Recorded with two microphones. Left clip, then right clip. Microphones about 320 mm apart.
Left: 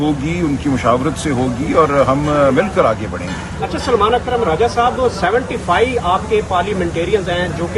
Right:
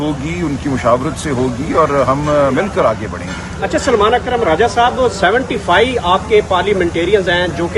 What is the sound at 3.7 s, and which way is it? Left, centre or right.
Speech, right.